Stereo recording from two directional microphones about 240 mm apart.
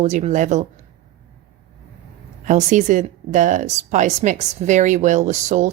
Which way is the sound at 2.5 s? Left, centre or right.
Right.